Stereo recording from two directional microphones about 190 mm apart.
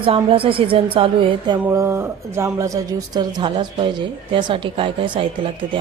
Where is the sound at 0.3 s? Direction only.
30° right (ahead or behind).